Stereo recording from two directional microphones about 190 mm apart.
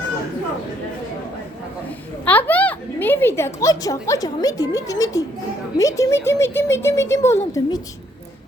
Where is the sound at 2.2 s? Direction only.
10° left (ahead or behind).